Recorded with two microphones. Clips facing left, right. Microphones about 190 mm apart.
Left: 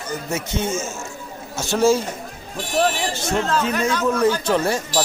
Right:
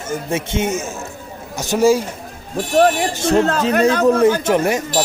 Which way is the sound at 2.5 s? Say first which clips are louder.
Right 7 dB; 55° right (ahead or behind).